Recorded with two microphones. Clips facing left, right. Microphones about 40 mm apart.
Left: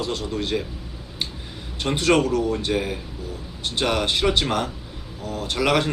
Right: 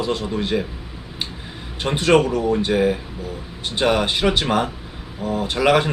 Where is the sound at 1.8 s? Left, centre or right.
Centre.